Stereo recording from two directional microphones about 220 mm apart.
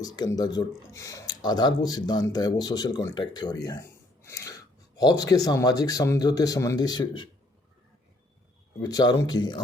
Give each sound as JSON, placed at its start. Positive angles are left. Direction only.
{"t": 0.0, "sound": "speech", "side_deg": 15}
{"t": 8.8, "sound": "speech", "side_deg": 20}